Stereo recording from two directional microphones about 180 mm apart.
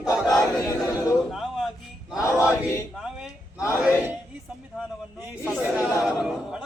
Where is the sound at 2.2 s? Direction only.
15° left (ahead or behind).